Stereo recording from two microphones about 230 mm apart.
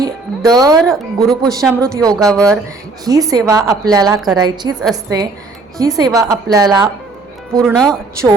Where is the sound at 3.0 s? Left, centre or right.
Centre.